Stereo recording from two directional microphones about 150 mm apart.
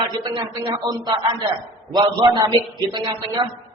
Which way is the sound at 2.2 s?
30° right (ahead or behind).